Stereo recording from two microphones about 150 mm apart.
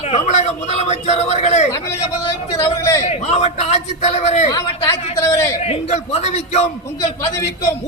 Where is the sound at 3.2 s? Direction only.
50° left (ahead or behind).